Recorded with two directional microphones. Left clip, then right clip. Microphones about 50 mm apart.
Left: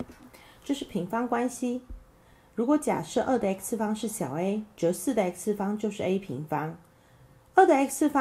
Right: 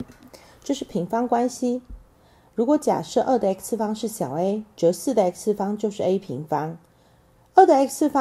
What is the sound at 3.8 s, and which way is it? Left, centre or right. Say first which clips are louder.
Speech: right 4 dB; left.